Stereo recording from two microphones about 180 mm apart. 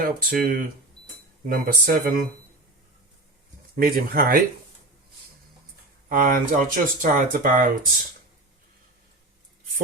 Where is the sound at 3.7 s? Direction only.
55° right (ahead or behind).